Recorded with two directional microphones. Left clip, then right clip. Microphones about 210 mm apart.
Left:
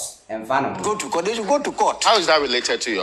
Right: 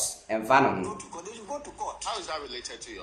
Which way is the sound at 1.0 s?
40° left (ahead or behind).